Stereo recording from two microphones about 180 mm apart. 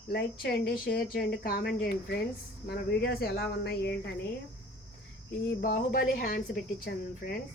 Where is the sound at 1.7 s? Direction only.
65° left (ahead or behind).